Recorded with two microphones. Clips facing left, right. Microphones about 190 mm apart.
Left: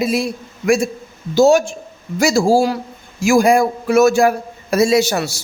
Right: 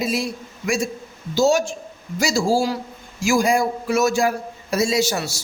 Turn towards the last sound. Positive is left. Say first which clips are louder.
# left 6 dB
turn(degrees=60)  # may be behind; listen again after turning